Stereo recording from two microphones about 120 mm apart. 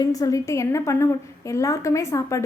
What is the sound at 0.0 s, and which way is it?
A woman's voice, 30° left (ahead or behind).